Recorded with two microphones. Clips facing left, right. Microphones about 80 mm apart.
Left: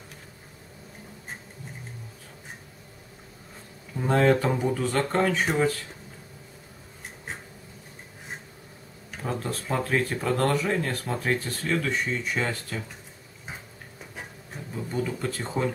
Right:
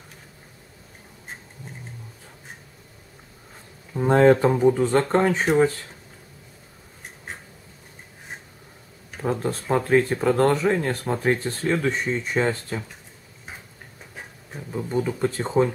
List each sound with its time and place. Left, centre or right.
3.9 s speech: right
9.2 s speech: right
14.9 s speech: right